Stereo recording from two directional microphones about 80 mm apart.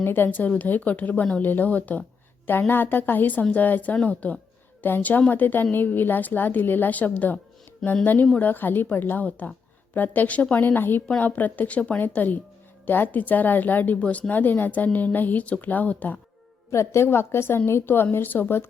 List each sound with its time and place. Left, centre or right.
0.0 s a woman's voice: left
16.7 s a woman's voice: left